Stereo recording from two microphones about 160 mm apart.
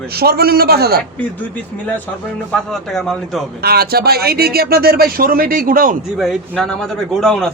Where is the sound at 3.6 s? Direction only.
75° right (ahead or behind); by 6.0 s 60° right (ahead or behind).